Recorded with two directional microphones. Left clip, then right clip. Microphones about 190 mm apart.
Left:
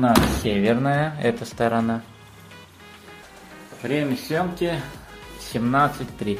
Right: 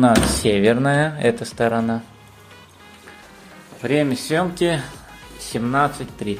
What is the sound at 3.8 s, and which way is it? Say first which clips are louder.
Speech: right 5 dB; 35° right (ahead or behind).